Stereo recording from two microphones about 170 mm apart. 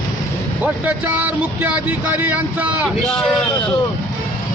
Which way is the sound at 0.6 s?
10° right (ahead or behind).